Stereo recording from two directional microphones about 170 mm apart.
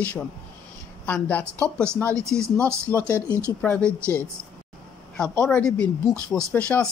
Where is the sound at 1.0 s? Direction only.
10° left (ahead or behind).